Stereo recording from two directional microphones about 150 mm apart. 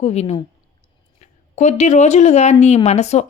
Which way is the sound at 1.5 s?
55° left (ahead or behind).